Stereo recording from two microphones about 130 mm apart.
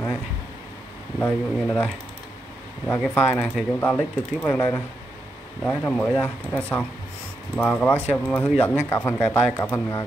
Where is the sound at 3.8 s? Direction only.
20° left (ahead or behind).